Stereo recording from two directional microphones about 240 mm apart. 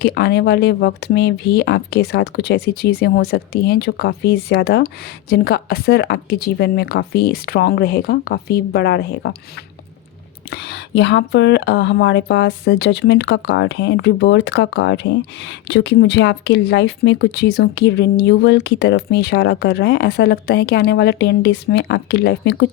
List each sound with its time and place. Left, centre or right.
0.0 s speech: left
10.5 s speech: left